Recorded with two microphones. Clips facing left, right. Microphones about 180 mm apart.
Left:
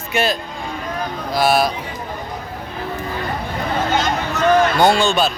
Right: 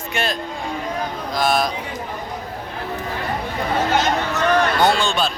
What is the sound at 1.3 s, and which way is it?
Speech, 5° left (ahead or behind).